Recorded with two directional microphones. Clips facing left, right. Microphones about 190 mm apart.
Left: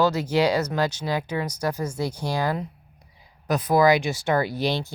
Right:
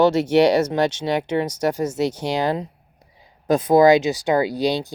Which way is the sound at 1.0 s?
25° right (ahead or behind).